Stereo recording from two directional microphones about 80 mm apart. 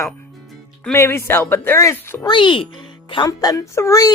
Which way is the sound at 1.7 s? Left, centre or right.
Left.